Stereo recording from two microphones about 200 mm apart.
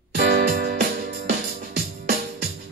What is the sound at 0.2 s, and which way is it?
Music, 50° right (ahead or behind).